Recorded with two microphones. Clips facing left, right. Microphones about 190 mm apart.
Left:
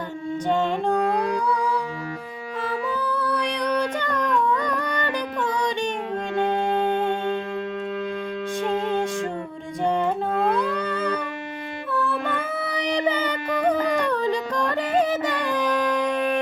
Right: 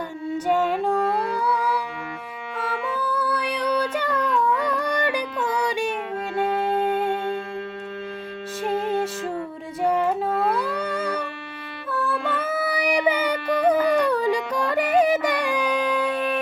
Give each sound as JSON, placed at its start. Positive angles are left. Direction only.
{"t": 0.4, "sound": "music", "side_deg": -10}
{"t": 1.0, "sound": "music", "side_deg": 15}
{"t": 3.0, "sound": "singing", "side_deg": -5}
{"t": 10.6, "sound": "music", "side_deg": -10}